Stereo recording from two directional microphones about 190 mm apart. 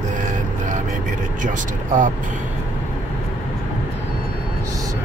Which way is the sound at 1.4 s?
40° right (ahead or behind).